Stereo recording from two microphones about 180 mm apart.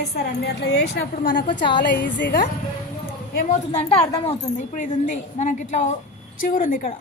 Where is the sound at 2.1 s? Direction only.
80° left.